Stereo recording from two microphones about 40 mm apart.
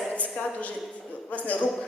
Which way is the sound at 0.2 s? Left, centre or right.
Left.